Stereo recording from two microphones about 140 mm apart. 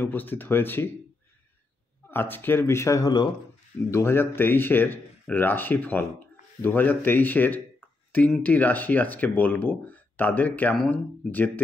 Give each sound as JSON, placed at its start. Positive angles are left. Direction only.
{"t": 0.0, "sound": "speech", "side_deg": 15}
{"t": 2.0, "sound": "speech", "side_deg": 15}
{"t": 3.9, "sound": "speech", "side_deg": 15}